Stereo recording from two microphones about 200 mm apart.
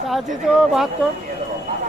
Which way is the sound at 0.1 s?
Centre (ahead or behind).